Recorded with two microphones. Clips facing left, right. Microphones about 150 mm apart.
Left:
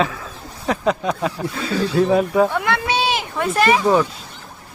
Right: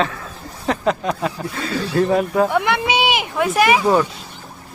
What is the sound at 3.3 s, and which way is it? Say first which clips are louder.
Speech: right 1 dB; 5° right (ahead or behind).